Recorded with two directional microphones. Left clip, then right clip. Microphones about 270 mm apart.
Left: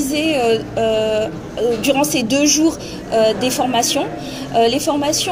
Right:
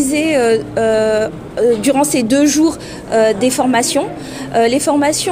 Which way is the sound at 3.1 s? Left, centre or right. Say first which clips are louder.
Right 3 dB; right.